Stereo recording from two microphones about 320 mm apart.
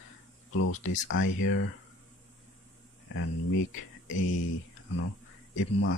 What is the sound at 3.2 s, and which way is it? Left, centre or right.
Speech, left.